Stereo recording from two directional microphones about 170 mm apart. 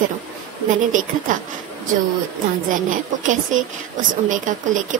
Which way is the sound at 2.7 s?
50° right (ahead or behind).